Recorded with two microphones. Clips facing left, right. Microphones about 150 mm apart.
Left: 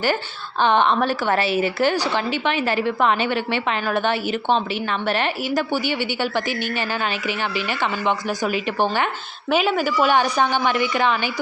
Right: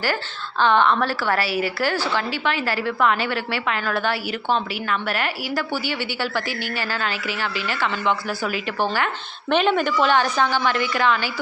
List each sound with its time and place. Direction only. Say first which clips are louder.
0.6 s a woman's voice: even; 20° left (ahead or behind)
9.5 s a woman's voice: even; 5° left (ahead or behind)